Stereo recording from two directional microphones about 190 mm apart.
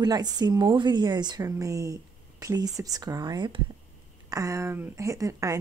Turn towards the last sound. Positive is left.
turn(degrees=-15)  # may be behind; listen again after turning